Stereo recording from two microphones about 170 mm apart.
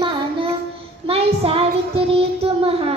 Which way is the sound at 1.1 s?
35° right (ahead or behind).